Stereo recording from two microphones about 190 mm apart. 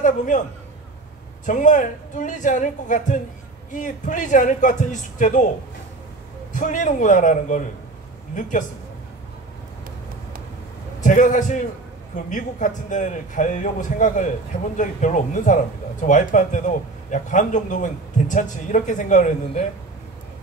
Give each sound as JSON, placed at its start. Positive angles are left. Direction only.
{"t": 1.4, "sound": "speech", "side_deg": 40}
{"t": 6.5, "sound": "speech", "side_deg": 40}
{"t": 11.0, "sound": "speech", "side_deg": 40}